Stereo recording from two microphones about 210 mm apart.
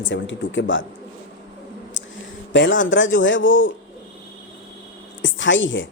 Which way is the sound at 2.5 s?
60° left (ahead or behind).